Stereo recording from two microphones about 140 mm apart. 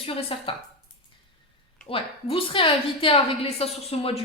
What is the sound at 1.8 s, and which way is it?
A woman's voice, 40° left (ahead or behind).